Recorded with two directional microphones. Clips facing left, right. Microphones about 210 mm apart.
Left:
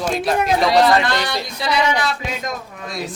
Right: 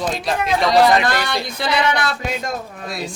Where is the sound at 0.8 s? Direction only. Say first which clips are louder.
Even; 15° right (ahead or behind).